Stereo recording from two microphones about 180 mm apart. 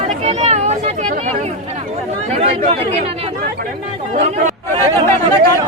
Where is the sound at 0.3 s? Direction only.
40° right (ahead or behind).